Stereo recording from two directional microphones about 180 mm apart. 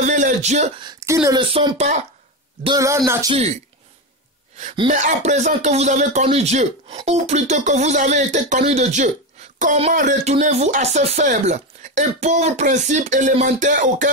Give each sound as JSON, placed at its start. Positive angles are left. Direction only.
{"t": 0.0, "sound": "a sound", "side_deg": -40}
{"t": 0.7, "sound": "speech", "side_deg": -20}
{"t": 4.8, "sound": "speech", "side_deg": -40}